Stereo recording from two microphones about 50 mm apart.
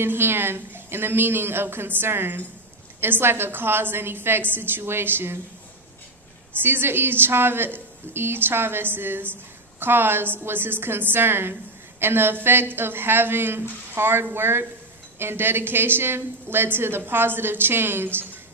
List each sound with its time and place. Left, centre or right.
0.0 s a woman's voice: right
6.5 s a woman's voice: right